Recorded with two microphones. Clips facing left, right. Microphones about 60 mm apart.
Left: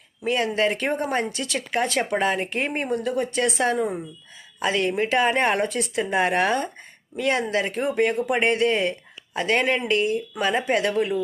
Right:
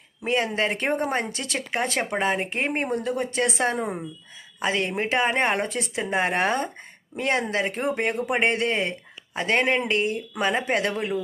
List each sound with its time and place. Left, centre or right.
0.3 s speech: right
10.9 s speech: right